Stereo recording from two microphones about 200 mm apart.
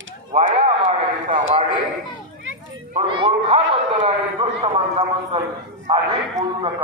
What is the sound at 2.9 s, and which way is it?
A man's voice, 30° right (ahead or behind).